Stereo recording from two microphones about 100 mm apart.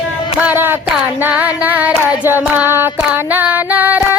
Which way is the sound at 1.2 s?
15° right (ahead or behind).